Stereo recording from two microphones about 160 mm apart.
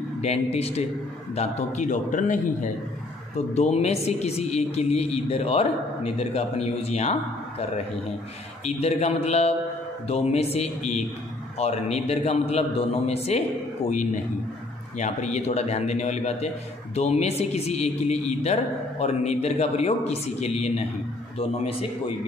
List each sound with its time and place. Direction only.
0.2 s a man's voice: 40° left (ahead or behind)
8.6 s speech: 40° left (ahead or behind)
13.8 s a man's voice: 50° left (ahead or behind)